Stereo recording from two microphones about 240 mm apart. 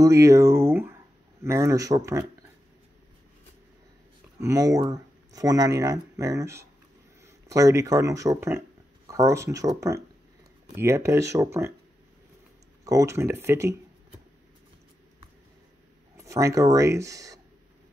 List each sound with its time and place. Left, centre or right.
0.0 s speech: centre
4.4 s speech: centre
12.8 s speech: centre
16.2 s speech: centre